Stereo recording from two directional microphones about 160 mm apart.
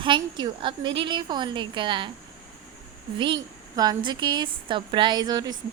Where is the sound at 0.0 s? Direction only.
30° right (ahead or behind).